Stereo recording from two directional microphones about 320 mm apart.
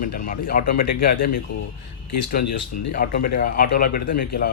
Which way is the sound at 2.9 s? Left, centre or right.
Left.